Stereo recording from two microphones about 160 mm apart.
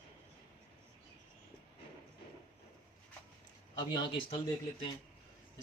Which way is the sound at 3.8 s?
30° left (ahead or behind).